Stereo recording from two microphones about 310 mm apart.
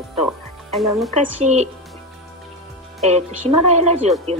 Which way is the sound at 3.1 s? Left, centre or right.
Right.